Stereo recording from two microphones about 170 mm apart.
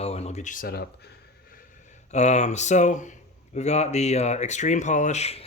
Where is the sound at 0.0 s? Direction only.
35° left (ahead or behind); by 0.9 s 60° left (ahead or behind).